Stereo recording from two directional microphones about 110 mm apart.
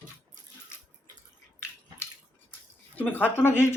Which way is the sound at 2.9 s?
15° left (ahead or behind).